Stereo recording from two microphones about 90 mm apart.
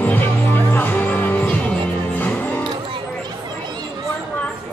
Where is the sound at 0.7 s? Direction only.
20° left (ahead or behind).